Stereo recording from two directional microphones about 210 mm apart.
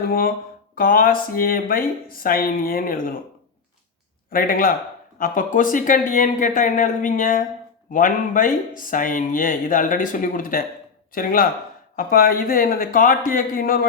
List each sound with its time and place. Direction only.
0.1 s speech: 45° left (ahead or behind)
4.3 s speech: 40° left (ahead or behind)